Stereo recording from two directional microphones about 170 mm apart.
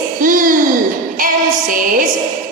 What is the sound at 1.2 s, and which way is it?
Music, 55° right (ahead or behind).